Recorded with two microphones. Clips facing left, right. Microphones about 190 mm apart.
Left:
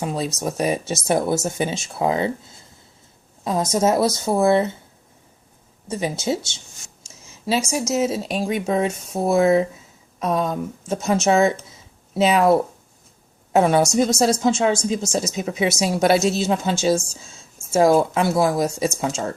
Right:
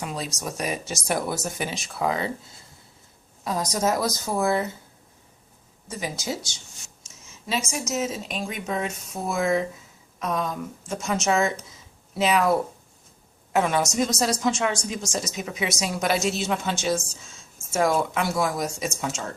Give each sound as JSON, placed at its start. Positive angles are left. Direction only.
{"t": 0.0, "sound": "a woman's voice", "side_deg": 30}
{"t": 3.4, "sound": "a woman's voice", "side_deg": 25}
{"t": 5.9, "sound": "a woman's voice", "side_deg": 25}
{"t": 7.7, "sound": "a woman's voice", "side_deg": 30}